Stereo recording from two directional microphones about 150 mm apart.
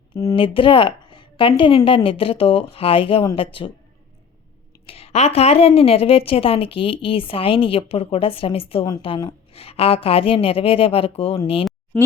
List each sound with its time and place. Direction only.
0.3 s a woman's voice: 35° left (ahead or behind)
4.9 s a woman's voice: 40° left (ahead or behind)